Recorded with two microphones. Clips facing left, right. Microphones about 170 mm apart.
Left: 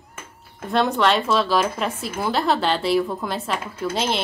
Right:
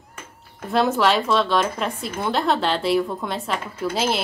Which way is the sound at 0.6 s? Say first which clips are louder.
Even; centre (ahead or behind).